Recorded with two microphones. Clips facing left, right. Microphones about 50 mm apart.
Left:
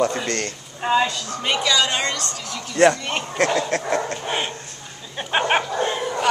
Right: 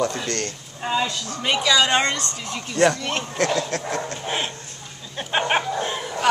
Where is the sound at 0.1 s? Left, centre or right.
Centre.